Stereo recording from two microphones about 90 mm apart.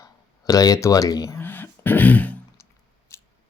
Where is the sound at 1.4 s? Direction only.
20° left (ahead or behind).